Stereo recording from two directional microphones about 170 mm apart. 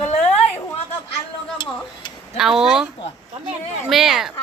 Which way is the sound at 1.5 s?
25° left (ahead or behind).